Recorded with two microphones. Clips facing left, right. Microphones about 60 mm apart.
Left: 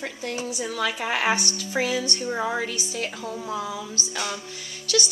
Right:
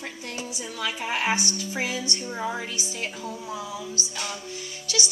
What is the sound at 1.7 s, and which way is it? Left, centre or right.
Speech, left.